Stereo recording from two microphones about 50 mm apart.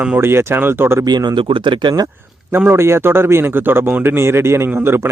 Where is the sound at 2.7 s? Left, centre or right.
Right.